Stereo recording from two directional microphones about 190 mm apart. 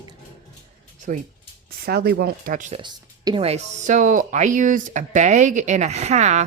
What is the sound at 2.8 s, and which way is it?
Speech, 25° right (ahead or behind).